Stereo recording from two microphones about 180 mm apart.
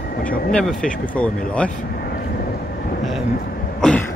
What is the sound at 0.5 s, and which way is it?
Speech, 5° left (ahead or behind).